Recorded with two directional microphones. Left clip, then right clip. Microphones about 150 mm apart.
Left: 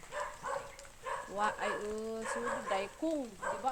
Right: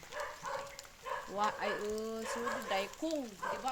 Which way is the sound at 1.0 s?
60° left (ahead or behind).